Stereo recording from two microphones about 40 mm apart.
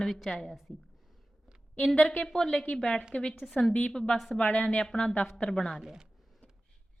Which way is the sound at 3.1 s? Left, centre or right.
Left.